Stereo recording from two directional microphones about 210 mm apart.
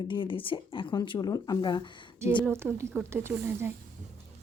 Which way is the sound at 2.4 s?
10° right (ahead or behind).